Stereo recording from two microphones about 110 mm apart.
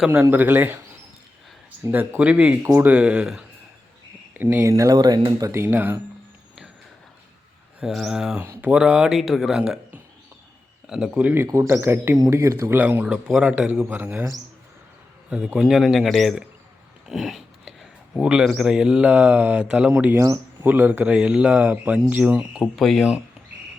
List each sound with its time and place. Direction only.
0.1 s speech: 15° right (ahead or behind)
1.8 s speech: 15° right (ahead or behind)
4.4 s speech: 20° right (ahead or behind)
4.7 s speech: 35° right (ahead or behind)
5.4 s speech: 25° right (ahead or behind)
7.8 s a man's voice: 5° right (ahead or behind)
11.4 s speech: 25° right (ahead or behind)
15.3 s a man's voice: 10° right (ahead or behind)
17.1 s a sound: centre (ahead or behind)
18.2 s speech: 5° right (ahead or behind)
20.1 s a man's voice: 30° right (ahead or behind)
20.7 s speech: 15° right (ahead or behind)
22.6 s a man's voice: centre (ahead or behind)